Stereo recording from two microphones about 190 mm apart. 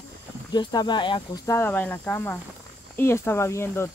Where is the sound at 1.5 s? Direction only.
10° left (ahead or behind).